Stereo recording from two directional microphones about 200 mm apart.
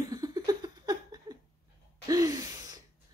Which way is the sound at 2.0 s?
15° right (ahead or behind).